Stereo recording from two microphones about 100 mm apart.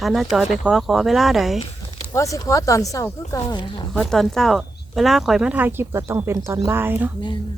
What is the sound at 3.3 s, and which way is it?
Speech, 45° left (ahead or behind).